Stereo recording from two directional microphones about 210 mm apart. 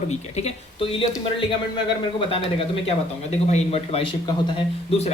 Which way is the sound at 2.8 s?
30° left (ahead or behind).